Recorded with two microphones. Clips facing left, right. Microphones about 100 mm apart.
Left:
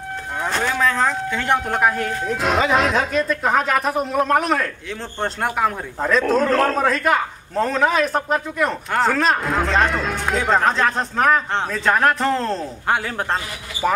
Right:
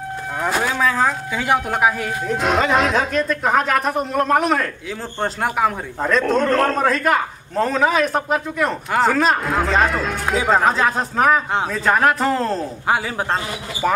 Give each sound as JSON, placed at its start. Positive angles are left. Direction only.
{"t": 0.4, "sound": "a man's voice", "side_deg": -5}